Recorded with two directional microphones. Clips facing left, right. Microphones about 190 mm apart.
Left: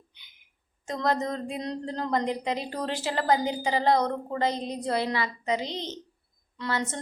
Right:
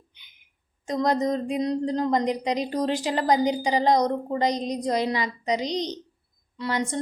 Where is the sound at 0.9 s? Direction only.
15° right (ahead or behind).